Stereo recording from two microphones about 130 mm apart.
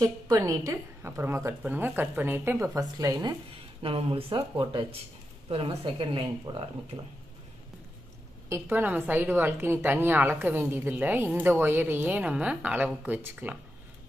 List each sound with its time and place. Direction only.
0.0 s a woman's voice: 25° right (ahead or behind)
3.8 s speech: 45° right (ahead or behind)
8.5 s a woman's voice: 20° right (ahead or behind)